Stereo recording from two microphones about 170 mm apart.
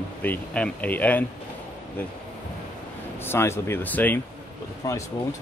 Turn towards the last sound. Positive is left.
turn(degrees=20)  # may be behind; listen again after turning